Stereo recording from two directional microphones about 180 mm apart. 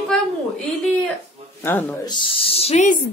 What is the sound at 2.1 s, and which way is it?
Speech, 30° left (ahead or behind).